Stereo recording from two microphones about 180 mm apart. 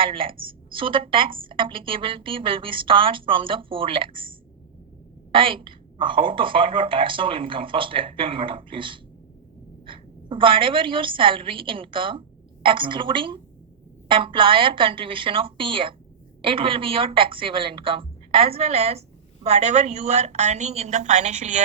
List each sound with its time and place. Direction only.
0.0 s a woman's voice: 30° right (ahead or behind)